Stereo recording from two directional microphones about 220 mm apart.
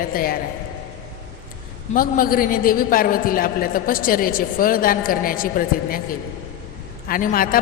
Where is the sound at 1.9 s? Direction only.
40° left (ahead or behind).